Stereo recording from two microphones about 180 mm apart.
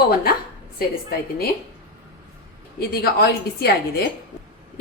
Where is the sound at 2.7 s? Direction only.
60° left (ahead or behind).